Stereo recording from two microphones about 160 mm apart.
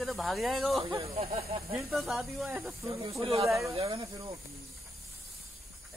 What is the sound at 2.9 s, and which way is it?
Speech, 35° right (ahead or behind).